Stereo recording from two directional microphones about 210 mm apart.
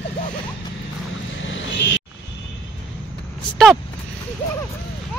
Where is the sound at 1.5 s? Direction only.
65° left (ahead or behind).